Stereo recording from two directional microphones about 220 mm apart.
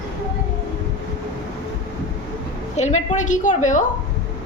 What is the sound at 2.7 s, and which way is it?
A woman's voice, 30° left (ahead or behind).